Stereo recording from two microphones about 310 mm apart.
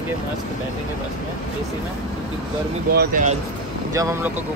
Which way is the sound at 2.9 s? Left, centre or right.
Right.